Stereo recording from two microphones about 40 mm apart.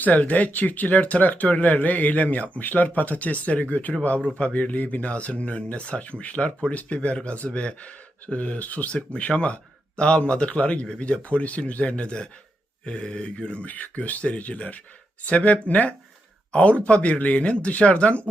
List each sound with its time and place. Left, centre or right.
0.0 s speech: left
10.0 s mantra: left
11.0 s speech: left
12.8 s mantra: left
13.7 s speech: left